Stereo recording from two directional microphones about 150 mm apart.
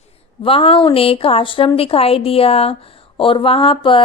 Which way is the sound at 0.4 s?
35° left (ahead or behind).